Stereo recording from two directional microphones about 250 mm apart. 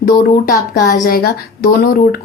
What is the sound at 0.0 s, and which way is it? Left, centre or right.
A woman's voice, left.